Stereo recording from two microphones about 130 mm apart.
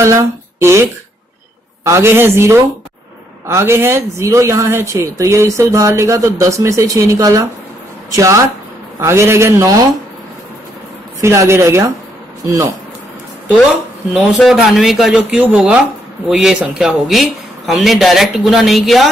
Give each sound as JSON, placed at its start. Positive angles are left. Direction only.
{"t": 0.0, "sound": "speech", "side_deg": -20}
{"t": 1.9, "sound": "speech", "side_deg": -20}
{"t": 11.1, "sound": "speech", "side_deg": -20}
{"t": 14.1, "sound": "a man's voice", "side_deg": 0}